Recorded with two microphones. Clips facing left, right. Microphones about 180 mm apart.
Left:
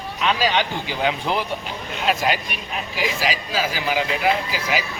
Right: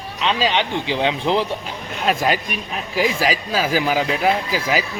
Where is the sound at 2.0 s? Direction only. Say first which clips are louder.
Right 2 dB; 45° right (ahead or behind).